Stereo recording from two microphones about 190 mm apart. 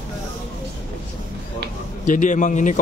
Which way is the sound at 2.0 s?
40° left (ahead or behind).